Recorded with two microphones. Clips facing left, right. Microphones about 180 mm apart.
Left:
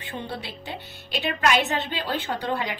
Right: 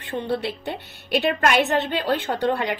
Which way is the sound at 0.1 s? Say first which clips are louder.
Right 9 dB; 60° right (ahead or behind).